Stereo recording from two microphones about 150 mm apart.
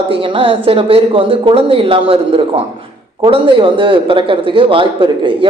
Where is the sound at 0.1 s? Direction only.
35° right (ahead or behind).